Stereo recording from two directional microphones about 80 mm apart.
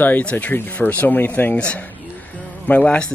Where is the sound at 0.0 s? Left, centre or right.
Centre.